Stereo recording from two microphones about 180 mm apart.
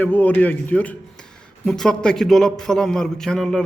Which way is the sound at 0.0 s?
10° left (ahead or behind).